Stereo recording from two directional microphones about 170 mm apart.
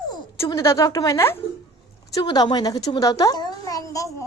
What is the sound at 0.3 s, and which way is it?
A woman's voice, 20° left (ahead or behind).